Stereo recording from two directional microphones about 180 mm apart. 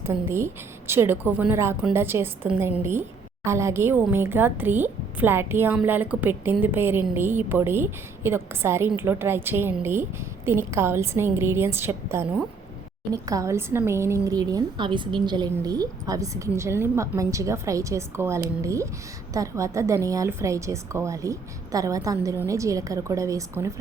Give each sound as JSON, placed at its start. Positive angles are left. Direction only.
{"t": 0.0, "sound": "a woman's voice", "side_deg": -15}